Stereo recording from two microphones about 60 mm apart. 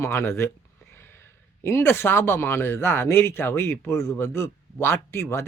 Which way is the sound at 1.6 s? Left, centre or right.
Left.